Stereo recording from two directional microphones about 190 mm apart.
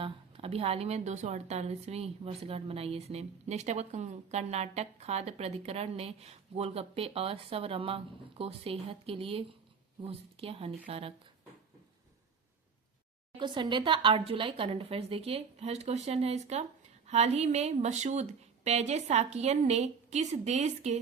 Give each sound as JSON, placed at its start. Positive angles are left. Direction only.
{"t": 0.0, "sound": "a woman's voice", "side_deg": -30}
{"t": 13.4, "sound": "a woman's voice", "side_deg": -25}